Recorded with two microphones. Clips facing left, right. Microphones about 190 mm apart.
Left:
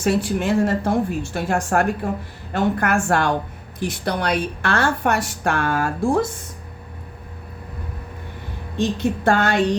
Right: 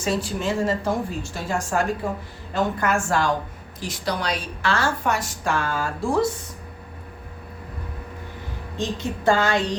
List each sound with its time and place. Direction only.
0.0 s a woman's voice: 60° left (ahead or behind)
9.0 s a woman's voice: 60° left (ahead or behind)